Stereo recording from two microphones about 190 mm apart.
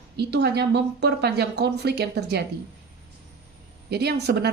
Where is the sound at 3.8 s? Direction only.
60° right (ahead or behind).